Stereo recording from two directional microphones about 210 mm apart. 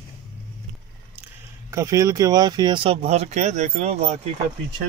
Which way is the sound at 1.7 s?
15° right (ahead or behind).